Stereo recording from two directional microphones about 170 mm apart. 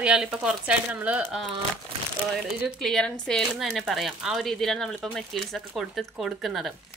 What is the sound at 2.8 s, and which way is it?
A woman's voice, centre (ahead or behind).